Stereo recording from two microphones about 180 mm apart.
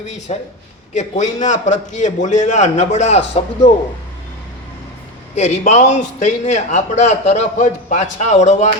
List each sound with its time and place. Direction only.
0.3 s a man's voice: 35° left (ahead or behind)
5.3 s a man's voice: 40° left (ahead or behind)